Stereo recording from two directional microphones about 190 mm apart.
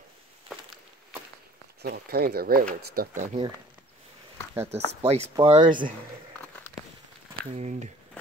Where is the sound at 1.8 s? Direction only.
55° right (ahead or behind).